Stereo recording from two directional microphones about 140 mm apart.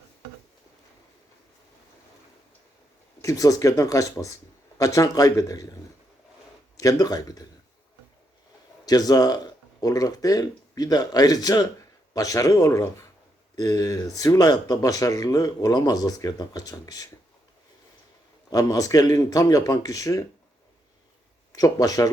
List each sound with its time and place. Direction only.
3.2 s speech: 25° left (ahead or behind)
6.7 s speech: 25° left (ahead or behind)
8.9 s speech: 25° left (ahead or behind)
18.5 s speech: 25° left (ahead or behind)
21.5 s speech: 25° left (ahead or behind)